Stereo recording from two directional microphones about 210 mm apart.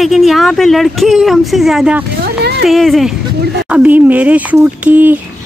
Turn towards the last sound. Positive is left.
turn(degrees=-10)  # may be behind; listen again after turning